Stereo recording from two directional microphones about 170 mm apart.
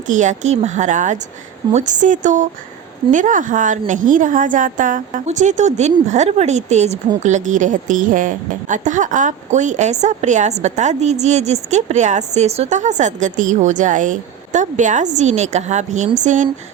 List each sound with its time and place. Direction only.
0.1 s a woman's voice: 45° right (ahead or behind)